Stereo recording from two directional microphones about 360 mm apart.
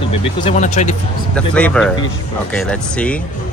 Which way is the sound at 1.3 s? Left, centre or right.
Centre.